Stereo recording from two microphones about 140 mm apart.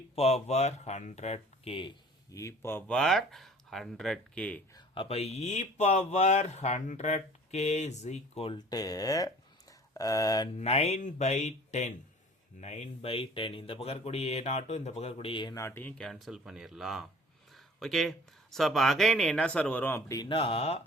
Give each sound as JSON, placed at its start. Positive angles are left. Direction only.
{"t": 0.2, "sound": "speech", "side_deg": 50}
{"t": 2.3, "sound": "speech", "side_deg": 20}
{"t": 4.9, "sound": "speech", "side_deg": 45}
{"t": 8.4, "sound": "speech", "side_deg": 30}
{"t": 10.6, "sound": "speech", "side_deg": 50}
{"t": 15.5, "sound": "speech", "side_deg": 20}
{"t": 17.5, "sound": "a sound", "side_deg": 0}
{"t": 18.5, "sound": "speech", "side_deg": 0}
{"t": 20.2, "sound": "speech", "side_deg": 40}